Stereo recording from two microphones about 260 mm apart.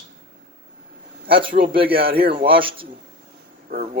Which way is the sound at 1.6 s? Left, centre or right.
Right.